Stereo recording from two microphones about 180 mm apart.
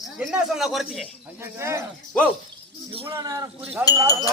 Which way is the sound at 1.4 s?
15° right (ahead or behind).